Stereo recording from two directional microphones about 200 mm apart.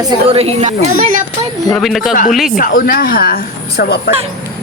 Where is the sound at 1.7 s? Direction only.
Centre (ahead or behind).